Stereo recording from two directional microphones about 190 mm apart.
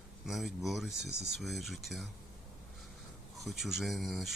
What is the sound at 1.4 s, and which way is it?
Speech, centre (ahead or behind).